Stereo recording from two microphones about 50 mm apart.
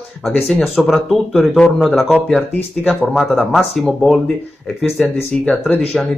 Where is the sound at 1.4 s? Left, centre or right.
Centre.